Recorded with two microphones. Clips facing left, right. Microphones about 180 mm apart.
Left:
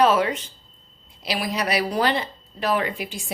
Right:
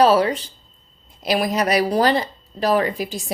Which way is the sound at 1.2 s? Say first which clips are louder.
Right 6 dB; 45° right (ahead or behind).